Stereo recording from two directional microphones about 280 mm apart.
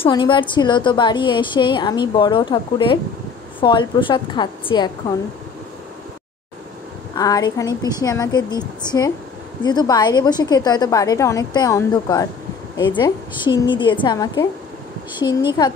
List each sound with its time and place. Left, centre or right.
0.0 s a woman's voice: centre
7.2 s a woman's voice: centre
15.6 s a woman's voice: centre